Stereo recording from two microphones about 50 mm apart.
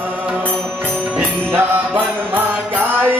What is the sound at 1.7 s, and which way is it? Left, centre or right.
Mantra, right.